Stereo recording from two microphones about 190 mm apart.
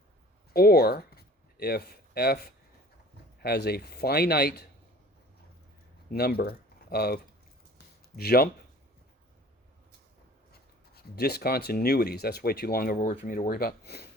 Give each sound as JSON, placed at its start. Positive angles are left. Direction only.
{"t": 0.5, "sound": "speech", "side_deg": 55}
{"t": 6.1, "sound": "speech", "side_deg": 55}
{"t": 10.5, "sound": "speech", "side_deg": 55}